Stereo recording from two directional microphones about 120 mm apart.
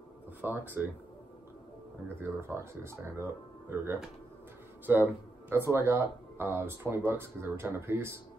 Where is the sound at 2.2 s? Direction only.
20° right (ahead or behind).